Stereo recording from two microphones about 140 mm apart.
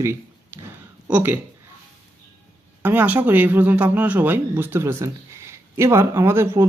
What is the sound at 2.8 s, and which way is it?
Speech, 15° right (ahead or behind).